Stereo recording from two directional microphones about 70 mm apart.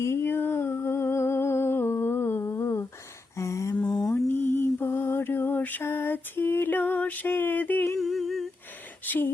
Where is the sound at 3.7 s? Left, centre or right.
Centre.